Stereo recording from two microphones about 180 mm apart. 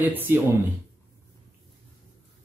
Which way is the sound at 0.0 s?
10° right (ahead or behind).